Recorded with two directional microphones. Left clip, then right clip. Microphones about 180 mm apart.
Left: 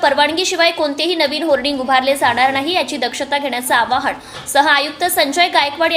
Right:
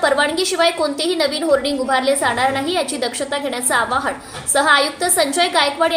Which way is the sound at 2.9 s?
35° left (ahead or behind).